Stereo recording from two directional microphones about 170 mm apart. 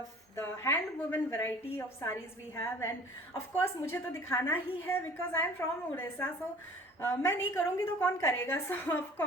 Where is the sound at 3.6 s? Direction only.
15° left (ahead or behind).